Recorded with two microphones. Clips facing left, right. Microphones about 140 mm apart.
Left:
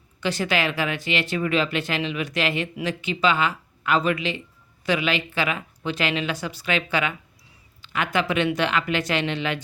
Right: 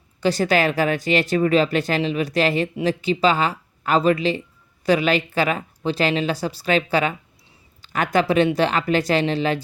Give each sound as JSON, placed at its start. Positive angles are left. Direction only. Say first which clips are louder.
{"t": 0.2, "sound": "speech", "louder": "right 5 dB", "side_deg": -40}